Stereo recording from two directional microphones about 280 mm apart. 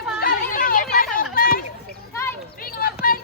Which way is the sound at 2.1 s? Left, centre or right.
Centre.